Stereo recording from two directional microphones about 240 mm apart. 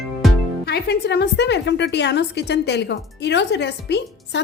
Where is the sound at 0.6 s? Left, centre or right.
Left.